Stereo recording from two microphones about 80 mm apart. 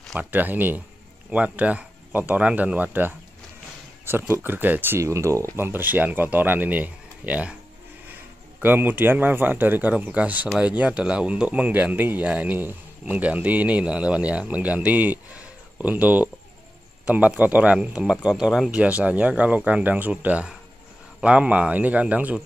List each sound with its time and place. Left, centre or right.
0.2 s speech: right
5.0 s speech: right
5.6 s speech: right
8.6 s speech: right